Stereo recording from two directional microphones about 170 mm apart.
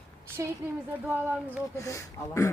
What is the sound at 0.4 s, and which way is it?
Speech, 15° right (ahead or behind).